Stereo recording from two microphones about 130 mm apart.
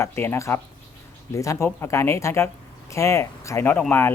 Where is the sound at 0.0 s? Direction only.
20° left (ahead or behind).